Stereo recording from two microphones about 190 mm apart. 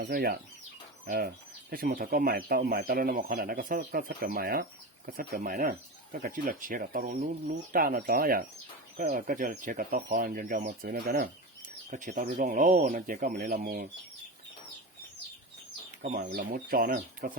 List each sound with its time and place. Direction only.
0.0 s speech: 55° right (ahead or behind)
16.3 s speech: 50° right (ahead or behind)